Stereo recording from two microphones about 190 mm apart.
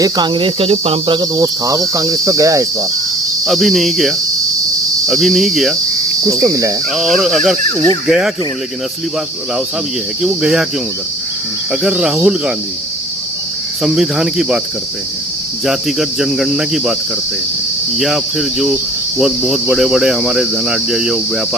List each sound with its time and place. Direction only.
0.0 s cricket: 25° right (ahead or behind)
3.4 s cricket: centre (ahead or behind)
6.2 s cricket: 15° right (ahead or behind)
6.9 s cricket: centre (ahead or behind)
10.2 s cricket: centre (ahead or behind)
11.7 s cricket: 5° right (ahead or behind)
13.8 s cricket: centre (ahead or behind)
15.6 s cricket: centre (ahead or behind)
17.9 s cricket: centre (ahead or behind)